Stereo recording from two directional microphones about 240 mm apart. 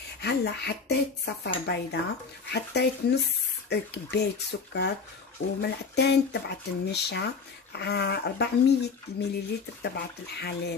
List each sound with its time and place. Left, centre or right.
0.2 s speech: left